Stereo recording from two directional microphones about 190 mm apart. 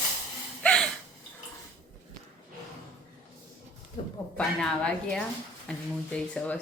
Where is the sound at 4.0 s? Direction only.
30° left (ahead or behind).